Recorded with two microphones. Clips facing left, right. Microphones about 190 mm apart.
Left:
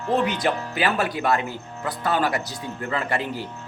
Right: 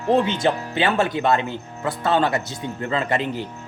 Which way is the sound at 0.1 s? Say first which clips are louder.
Right 3 dB; 25° right (ahead or behind).